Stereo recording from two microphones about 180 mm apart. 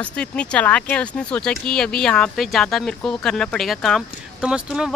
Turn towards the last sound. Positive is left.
turn(degrees=-5)  # may be behind; listen again after turning